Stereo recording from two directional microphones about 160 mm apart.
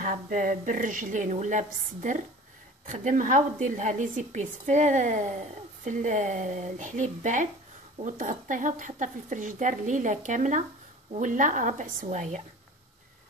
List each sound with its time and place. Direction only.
0.0 s a woman's voice: 50° right (ahead or behind)